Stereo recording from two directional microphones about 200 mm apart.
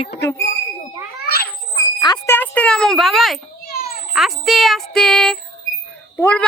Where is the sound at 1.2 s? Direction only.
50° left (ahead or behind).